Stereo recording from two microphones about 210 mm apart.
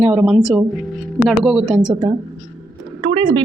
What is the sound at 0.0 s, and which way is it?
Speech, 5° right (ahead or behind).